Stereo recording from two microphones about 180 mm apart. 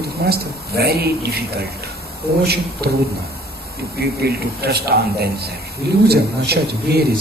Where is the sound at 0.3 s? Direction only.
60° right (ahead or behind).